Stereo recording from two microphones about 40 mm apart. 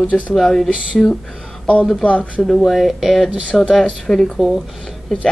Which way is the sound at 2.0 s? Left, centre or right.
Left.